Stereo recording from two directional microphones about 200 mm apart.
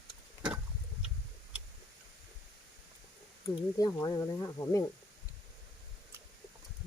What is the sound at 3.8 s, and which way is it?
Speech, 20° left (ahead or behind).